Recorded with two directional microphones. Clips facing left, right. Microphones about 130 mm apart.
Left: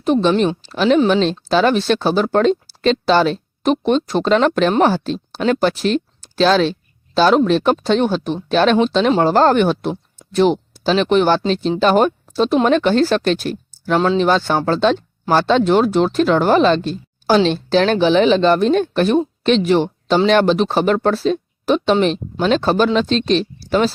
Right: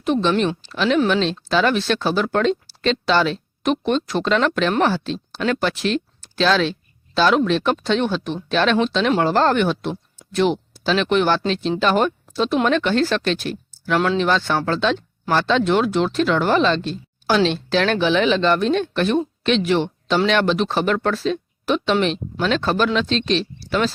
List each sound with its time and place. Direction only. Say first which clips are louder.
0.0 s speech: left 4 dB; 40° left (ahead or behind)
9.9 s a sound: left 4 dB; 30° left (ahead or behind)
10.5 s speech: left 4 dB; 35° left (ahead or behind)